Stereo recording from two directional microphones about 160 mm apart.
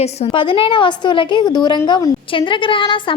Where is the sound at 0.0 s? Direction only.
35° left (ahead or behind).